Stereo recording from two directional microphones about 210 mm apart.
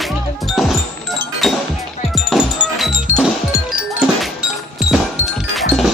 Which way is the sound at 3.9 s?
5° right (ahead or behind).